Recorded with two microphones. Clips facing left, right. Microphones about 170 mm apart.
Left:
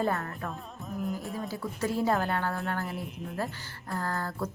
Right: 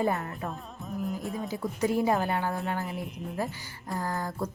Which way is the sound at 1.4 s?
15° right (ahead or behind).